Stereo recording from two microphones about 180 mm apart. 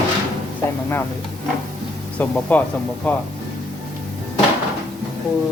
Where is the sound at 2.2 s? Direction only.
10° left (ahead or behind).